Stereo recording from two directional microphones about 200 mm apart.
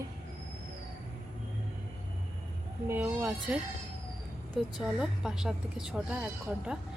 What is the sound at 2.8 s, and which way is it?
Speech, 10° right (ahead or behind).